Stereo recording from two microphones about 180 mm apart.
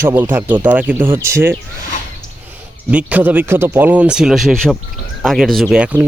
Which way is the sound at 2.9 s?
10° right (ahead or behind).